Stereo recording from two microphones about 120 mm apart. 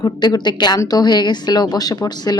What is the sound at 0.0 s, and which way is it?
Speech, 35° left (ahead or behind).